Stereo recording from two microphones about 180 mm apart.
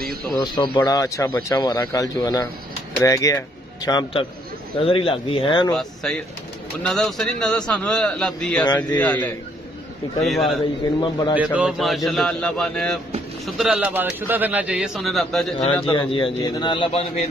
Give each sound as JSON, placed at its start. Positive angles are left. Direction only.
{"t": 0.4, "sound": "speech", "side_deg": 25}
{"t": 5.7, "sound": "a man's voice", "side_deg": 5}
{"t": 11.0, "sound": "speech", "side_deg": 25}
{"t": 11.3, "sound": "a man's voice", "side_deg": -5}
{"t": 15.6, "sound": "a man's voice", "side_deg": 30}